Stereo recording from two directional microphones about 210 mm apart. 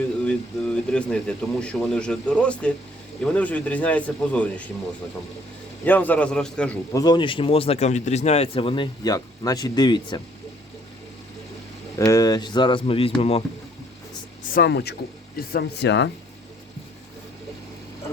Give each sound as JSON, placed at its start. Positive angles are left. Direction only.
{"t": 0.3, "sound": "speech", "side_deg": 5}
{"t": 5.8, "sound": "speech", "side_deg": 10}
{"t": 6.9, "sound": "a man's voice", "side_deg": 20}
{"t": 11.9, "sound": "a man's voice", "side_deg": 15}
{"t": 14.5, "sound": "speech", "side_deg": 50}